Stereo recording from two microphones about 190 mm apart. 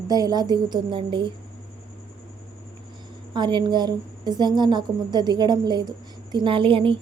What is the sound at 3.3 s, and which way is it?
A woman's voice, 25° right (ahead or behind).